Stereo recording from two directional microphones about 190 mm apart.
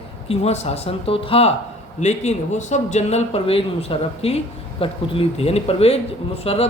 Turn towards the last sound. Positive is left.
turn(degrees=30)  # may be behind; listen again after turning